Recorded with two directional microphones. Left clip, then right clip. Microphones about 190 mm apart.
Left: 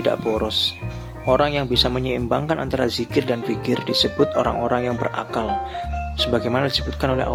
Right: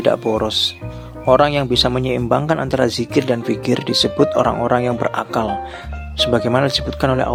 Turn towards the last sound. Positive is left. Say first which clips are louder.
# right 4 dB
turn(degrees=-30)  # may be behind; listen again after turning